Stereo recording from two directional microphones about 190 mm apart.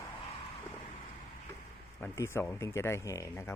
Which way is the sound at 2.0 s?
15° left (ahead or behind).